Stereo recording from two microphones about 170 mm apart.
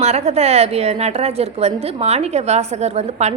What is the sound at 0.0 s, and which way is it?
A woman's voice, 40° right (ahead or behind).